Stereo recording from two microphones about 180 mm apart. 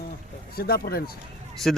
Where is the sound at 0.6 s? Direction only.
60° left (ahead or behind).